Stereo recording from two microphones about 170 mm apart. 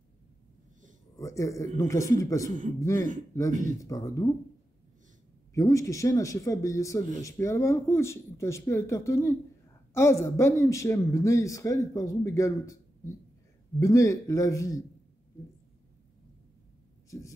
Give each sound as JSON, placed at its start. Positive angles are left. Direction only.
{"t": 1.1, "sound": "a man's voice", "side_deg": 20}
{"t": 5.5, "sound": "a man's voice", "side_deg": 20}